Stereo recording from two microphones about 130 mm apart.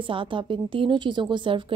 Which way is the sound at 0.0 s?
40° right (ahead or behind).